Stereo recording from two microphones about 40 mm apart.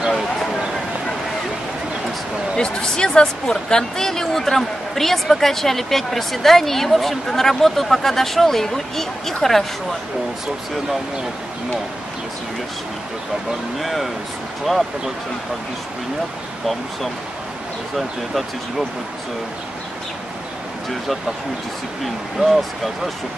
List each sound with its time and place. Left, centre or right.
2.5 s speech: centre
13.7 s speech: centre
22.0 s speech: centre